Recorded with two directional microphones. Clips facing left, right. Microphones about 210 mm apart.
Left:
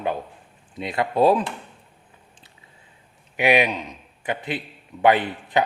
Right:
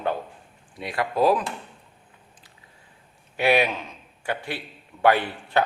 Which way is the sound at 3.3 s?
15° left (ahead or behind).